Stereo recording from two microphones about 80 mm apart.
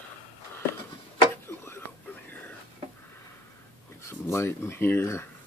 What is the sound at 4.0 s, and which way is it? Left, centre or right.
Speech, left.